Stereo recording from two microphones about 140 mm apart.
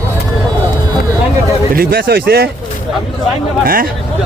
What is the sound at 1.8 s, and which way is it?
Speech, 90° right.